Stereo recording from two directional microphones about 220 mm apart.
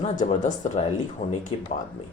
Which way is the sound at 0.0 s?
35° left (ahead or behind).